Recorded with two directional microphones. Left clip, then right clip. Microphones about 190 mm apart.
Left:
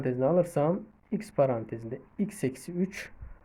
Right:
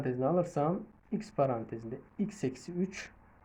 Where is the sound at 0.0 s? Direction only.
40° left (ahead or behind).